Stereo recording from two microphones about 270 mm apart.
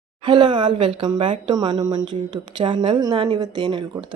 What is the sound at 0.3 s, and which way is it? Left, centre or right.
A woman's voice, centre.